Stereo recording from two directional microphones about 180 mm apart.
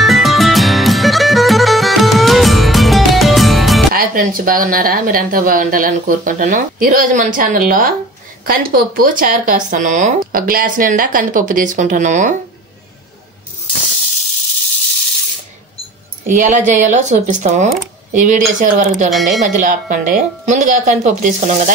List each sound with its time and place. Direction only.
0.0 s music: centre (ahead or behind)
3.9 s speech: 50° right (ahead or behind)
16.3 s speech: 45° right (ahead or behind)
19.0 s speech: centre (ahead or behind)
19.4 s speech: 45° right (ahead or behind)